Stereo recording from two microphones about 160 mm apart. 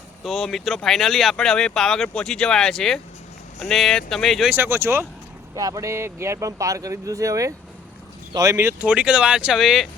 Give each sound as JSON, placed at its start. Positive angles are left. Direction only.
{"t": 0.2, "sound": "speech", "side_deg": 0}
{"t": 4.4, "sound": "speech", "side_deg": -15}